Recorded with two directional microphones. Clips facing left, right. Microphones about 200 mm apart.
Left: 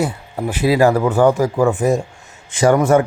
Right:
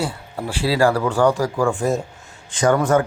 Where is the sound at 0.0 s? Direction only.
15° left (ahead or behind).